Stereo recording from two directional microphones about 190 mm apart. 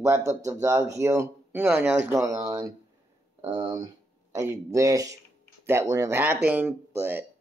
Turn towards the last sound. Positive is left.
turn(degrees=-10)  # may be behind; listen again after turning